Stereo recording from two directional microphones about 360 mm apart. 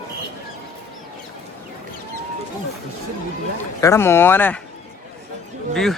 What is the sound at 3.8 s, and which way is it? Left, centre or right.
Speech, centre.